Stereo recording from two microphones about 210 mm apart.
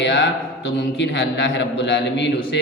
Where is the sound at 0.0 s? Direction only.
55° left (ahead or behind).